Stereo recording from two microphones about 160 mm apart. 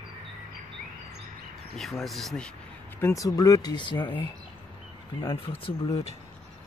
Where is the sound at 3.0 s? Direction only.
20° left (ahead or behind).